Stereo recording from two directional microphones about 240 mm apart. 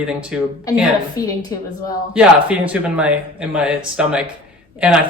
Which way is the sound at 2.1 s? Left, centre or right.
Centre.